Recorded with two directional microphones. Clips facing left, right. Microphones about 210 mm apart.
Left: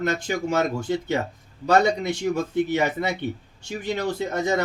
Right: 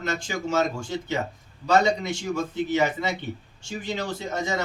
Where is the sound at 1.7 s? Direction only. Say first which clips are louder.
Left 2 dB; 60° left (ahead or behind).